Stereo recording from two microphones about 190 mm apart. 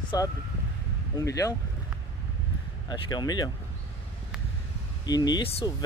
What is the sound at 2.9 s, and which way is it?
Speech, 20° left (ahead or behind).